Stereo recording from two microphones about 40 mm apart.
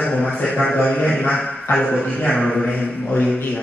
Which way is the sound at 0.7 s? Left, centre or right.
Left.